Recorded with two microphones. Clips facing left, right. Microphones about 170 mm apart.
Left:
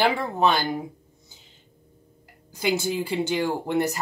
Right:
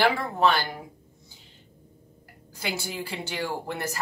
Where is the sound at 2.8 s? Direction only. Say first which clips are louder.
Left 8 dB; 20° left (ahead or behind).